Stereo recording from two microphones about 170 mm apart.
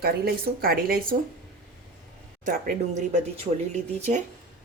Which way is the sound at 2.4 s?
55° right (ahead or behind).